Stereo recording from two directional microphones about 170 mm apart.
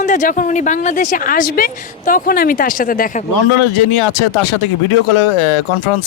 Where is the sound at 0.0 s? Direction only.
45° left (ahead or behind).